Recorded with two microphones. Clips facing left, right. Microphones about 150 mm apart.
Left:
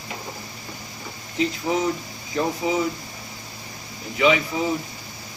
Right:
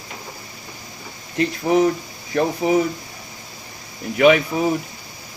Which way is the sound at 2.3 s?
65° right (ahead or behind).